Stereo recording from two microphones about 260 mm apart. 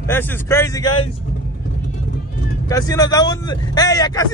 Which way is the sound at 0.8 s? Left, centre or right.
Left.